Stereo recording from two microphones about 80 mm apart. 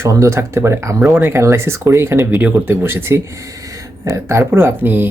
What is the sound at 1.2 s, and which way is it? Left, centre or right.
Speech, right.